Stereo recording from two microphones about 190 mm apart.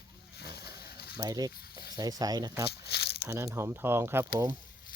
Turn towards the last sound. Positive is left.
turn(degrees=-10)  # may be behind; listen again after turning